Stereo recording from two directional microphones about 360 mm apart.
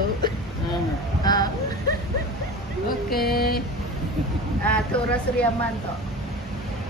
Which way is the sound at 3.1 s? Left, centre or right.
Left.